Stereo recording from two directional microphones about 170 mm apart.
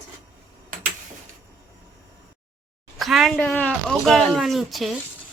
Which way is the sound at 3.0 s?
Centre (ahead or behind).